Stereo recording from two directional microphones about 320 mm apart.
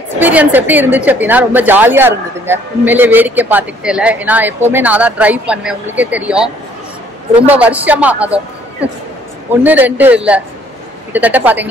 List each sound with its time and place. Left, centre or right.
0.2 s a woman's voice: centre
9.6 s a woman's voice: centre